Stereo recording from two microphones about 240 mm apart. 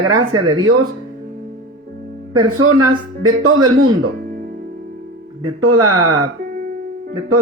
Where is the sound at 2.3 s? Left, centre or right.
Right.